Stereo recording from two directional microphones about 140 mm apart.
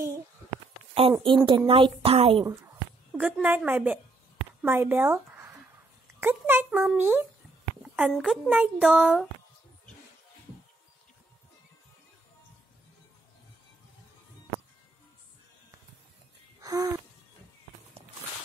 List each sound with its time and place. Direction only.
1.2 s speech: 35° right (ahead or behind)
2.4 s speech: 20° right (ahead or behind)
3.1 s a woman's voice: 5° right (ahead or behind)
4.6 s a sound: 15° right (ahead or behind)
6.2 s a child's voice: 15° right (ahead or behind)
7.8 s a sound: 5° right (ahead or behind)
8.1 s speech: centre (ahead or behind)
16.6 s music: 25° right (ahead or behind)